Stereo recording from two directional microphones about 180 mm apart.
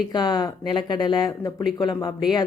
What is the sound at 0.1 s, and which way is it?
Speech, 25° left (ahead or behind).